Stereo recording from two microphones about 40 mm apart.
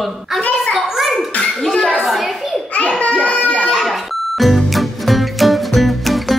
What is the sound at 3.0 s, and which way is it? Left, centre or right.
Speech, left.